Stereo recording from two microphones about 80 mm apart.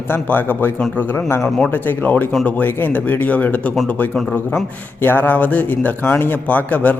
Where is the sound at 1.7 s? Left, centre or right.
Left.